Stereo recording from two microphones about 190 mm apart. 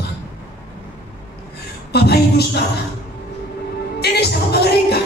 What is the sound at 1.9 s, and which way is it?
Speech, 55° left (ahead or behind).